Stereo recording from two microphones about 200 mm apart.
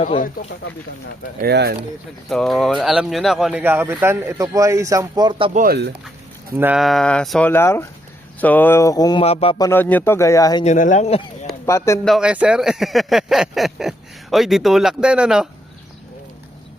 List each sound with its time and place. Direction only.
0.0 s speech: 40° left (ahead or behind)
1.4 s speech: 55° right (ahead or behind)
2.3 s speech: centre (ahead or behind); by 5.5 s 20° right (ahead or behind)
5.5 s speech: 50° right (ahead or behind)
6.6 s a man's voice: 5° right (ahead or behind); by 9.6 s 25° left (ahead or behind)
9.6 s speech: 10° left (ahead or behind)
10.6 s speech: 35° left (ahead or behind)
11.6 s speech: 15° left (ahead or behind)
12.0 s speech: centre (ahead or behind)